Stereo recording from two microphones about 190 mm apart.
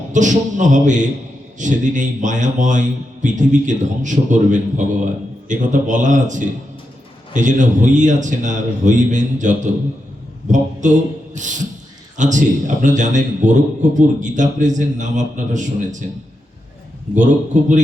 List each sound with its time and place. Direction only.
0.1 s a man's voice: 40° right (ahead or behind)
17.5 s a man's voice: 40° right (ahead or behind)